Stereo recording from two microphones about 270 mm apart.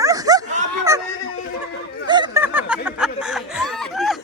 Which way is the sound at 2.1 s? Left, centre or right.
Centre.